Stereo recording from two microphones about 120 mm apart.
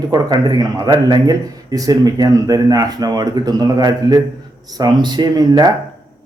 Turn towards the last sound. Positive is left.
turn(degrees=-35)  # may be behind; listen again after turning